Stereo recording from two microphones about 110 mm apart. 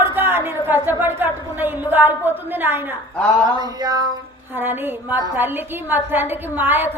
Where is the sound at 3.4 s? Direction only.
35° right (ahead or behind).